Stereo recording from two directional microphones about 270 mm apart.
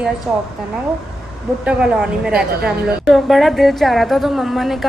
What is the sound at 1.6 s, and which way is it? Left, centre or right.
A woman's voice, centre.